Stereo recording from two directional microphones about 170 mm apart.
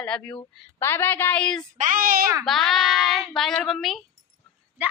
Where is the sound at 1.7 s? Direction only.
50° right (ahead or behind).